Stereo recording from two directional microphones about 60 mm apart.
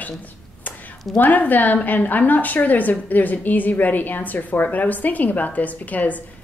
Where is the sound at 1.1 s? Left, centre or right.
Left.